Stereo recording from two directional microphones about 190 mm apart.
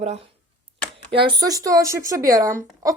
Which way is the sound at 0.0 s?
35° right (ahead or behind).